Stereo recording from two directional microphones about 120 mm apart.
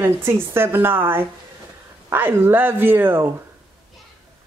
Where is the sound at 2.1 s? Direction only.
15° right (ahead or behind).